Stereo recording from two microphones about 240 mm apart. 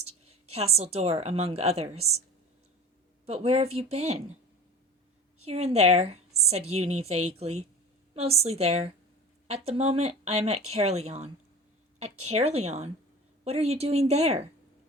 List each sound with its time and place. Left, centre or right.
0.3 s a woman's voice: right
3.2 s a woman's voice: right
5.5 s a woman's voice: right
12.3 s a woman's voice: right